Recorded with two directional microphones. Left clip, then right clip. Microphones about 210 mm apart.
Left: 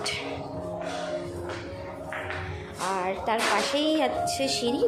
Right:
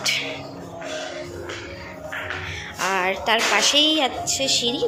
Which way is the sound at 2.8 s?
Centre (ahead or behind).